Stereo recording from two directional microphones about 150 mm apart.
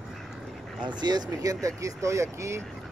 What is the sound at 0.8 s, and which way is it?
Speech, 30° right (ahead or behind).